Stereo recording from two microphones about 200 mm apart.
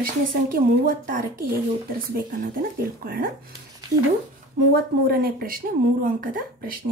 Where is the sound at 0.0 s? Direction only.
45° right (ahead or behind).